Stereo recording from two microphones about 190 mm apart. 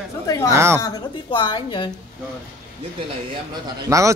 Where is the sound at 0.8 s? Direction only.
20° left (ahead or behind).